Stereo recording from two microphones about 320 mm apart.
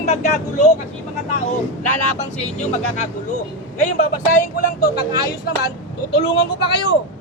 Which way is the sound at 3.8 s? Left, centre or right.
Left.